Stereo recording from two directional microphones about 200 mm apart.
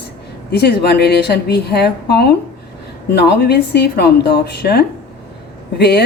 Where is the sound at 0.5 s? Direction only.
55° left (ahead or behind).